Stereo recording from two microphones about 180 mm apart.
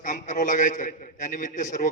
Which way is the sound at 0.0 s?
45° left (ahead or behind).